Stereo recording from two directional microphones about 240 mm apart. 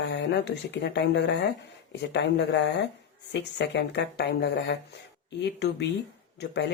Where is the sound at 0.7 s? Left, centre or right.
Left.